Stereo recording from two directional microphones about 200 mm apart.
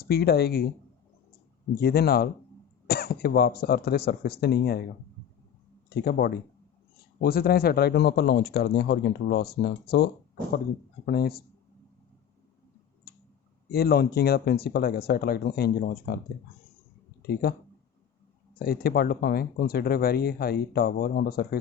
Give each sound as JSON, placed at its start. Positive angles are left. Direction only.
{"t": 0.0, "sound": "speech", "side_deg": 50}
{"t": 1.7, "sound": "speech", "side_deg": 50}
{"t": 5.9, "sound": "speech", "side_deg": 50}
{"t": 13.1, "sound": "tick", "side_deg": 50}
{"t": 13.7, "sound": "speech", "side_deg": 50}
{"t": 18.6, "sound": "speech", "side_deg": 50}